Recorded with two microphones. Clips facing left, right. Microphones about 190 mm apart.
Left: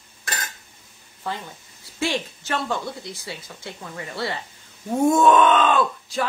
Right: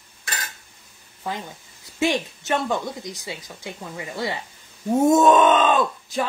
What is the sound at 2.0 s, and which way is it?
Speech, 20° right (ahead or behind).